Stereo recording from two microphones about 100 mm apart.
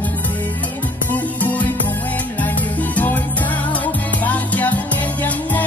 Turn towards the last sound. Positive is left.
turn(degrees=15)  # may be behind; listen again after turning